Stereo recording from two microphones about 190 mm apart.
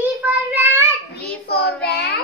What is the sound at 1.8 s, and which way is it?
Child singing, 60° left (ahead or behind).